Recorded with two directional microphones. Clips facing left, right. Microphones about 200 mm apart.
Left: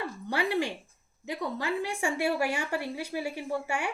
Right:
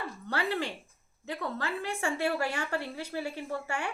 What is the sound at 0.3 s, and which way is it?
A woman's voice, 15° left (ahead or behind).